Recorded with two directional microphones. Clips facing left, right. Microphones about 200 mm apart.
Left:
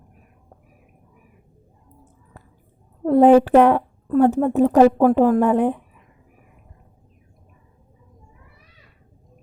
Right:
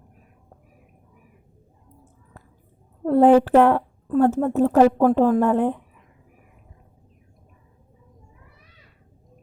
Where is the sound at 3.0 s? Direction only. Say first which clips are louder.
Left 2 dB; 15° left (ahead or behind).